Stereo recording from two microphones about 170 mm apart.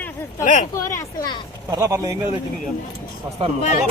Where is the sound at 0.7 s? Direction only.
20° left (ahead or behind).